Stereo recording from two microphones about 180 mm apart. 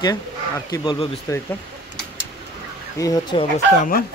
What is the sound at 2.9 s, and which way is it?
Speech, 20° left (ahead or behind).